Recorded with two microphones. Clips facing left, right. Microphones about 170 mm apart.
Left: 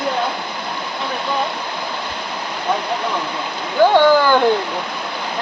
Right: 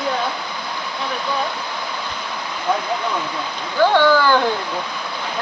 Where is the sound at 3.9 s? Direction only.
15° left (ahead or behind).